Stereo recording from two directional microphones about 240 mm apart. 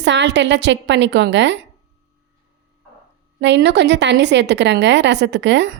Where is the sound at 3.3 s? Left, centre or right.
Right.